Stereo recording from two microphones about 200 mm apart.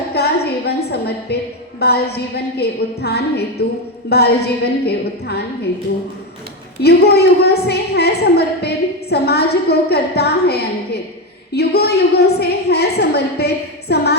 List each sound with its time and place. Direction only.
0.1 s a sound: 55° left (ahead or behind)
1.8 s a woman's voice: 55° left (ahead or behind)
6.8 s a woman's voice: 55° left (ahead or behind)